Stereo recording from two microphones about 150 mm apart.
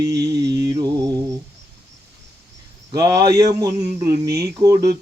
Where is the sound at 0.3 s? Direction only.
25° right (ahead or behind).